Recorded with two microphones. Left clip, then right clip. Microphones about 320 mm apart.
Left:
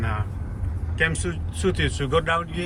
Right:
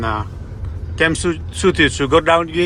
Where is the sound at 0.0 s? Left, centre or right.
Centre.